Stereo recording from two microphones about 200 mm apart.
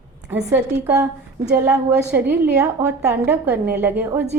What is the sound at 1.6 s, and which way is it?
A woman's voice, 10° right (ahead or behind).